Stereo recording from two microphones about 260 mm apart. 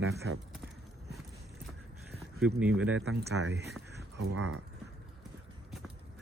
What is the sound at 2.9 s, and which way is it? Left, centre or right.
Speech, right.